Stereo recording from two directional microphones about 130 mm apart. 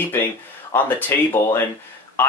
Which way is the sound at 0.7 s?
15° left (ahead or behind).